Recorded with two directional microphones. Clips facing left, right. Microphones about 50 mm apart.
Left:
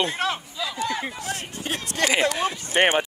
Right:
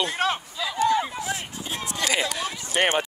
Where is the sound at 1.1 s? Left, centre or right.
Centre.